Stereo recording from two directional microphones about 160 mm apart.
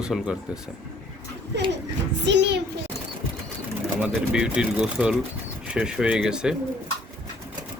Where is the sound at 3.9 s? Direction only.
5° right (ahead or behind).